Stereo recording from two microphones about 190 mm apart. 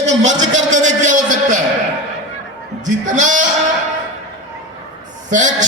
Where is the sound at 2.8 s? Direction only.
40° right (ahead or behind).